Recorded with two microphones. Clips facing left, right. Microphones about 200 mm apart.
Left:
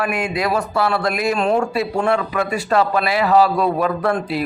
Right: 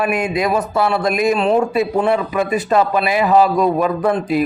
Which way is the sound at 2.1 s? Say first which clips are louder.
Right 2 dB; 20° right (ahead or behind).